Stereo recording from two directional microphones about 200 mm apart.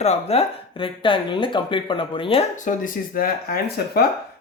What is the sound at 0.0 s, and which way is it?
Speech, 30° left (ahead or behind).